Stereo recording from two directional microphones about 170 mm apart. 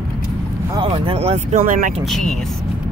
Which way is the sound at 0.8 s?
30° right (ahead or behind).